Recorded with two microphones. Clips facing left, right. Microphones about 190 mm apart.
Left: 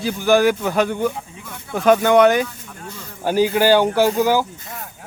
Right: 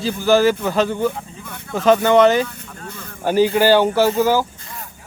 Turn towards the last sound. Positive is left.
turn(degrees=15)  # may be behind; listen again after turning